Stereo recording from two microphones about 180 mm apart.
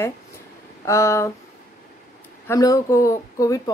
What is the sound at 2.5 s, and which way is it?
A woman's voice, 20° left (ahead or behind).